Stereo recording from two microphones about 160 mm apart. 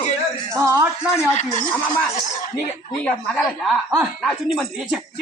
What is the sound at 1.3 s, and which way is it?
Speech, 45° left (ahead or behind).